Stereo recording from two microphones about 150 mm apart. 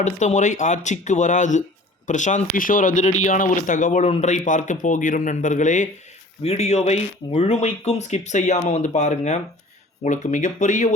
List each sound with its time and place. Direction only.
0.0 s speech: 55° left (ahead or behind)